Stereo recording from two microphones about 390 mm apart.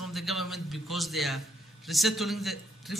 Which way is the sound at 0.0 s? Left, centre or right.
Centre.